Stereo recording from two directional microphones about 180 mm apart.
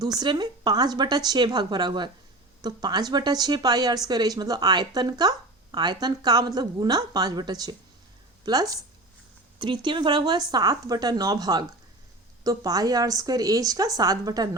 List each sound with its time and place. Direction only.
0.2 s a woman's voice: 25° right (ahead or behind)